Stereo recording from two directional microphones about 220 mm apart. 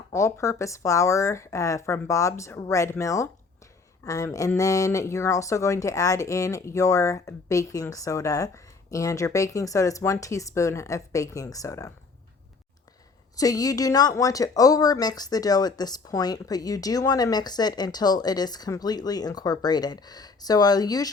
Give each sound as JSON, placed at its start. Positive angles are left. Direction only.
{"t": 0.1, "sound": "speech", "side_deg": 15}
{"t": 13.3, "sound": "speech", "side_deg": 15}